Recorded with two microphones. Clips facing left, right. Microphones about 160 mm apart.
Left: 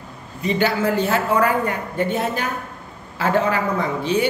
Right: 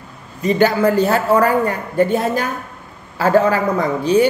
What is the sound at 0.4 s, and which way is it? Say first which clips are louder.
A man's voice: right 6 dB; 45° right (ahead or behind).